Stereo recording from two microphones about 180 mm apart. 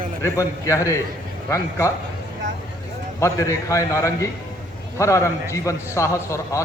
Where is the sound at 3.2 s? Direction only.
15° left (ahead or behind).